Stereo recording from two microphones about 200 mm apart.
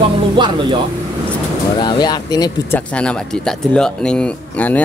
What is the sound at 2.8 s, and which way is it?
Speech, 5° left (ahead or behind).